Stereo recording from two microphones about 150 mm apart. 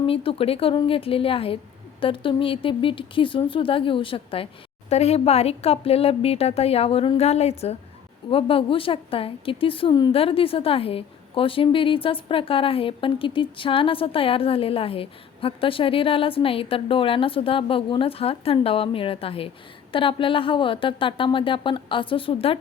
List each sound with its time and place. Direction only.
0.0 s a woman's voice: 40° left (ahead or behind)